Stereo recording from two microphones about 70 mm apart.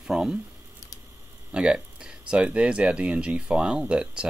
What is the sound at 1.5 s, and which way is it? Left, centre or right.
Speech, centre.